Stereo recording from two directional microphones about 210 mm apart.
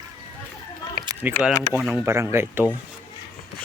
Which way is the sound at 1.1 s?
15° right (ahead or behind).